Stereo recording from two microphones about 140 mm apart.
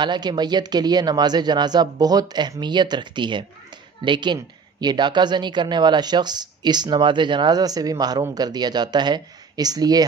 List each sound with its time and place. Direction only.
0.0 s a woman's voice: 30° right (ahead or behind)